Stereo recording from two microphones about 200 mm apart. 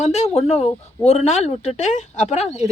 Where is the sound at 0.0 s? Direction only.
35° left (ahead or behind).